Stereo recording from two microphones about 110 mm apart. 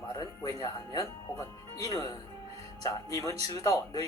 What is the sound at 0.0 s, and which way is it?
Music, 30° left (ahead or behind).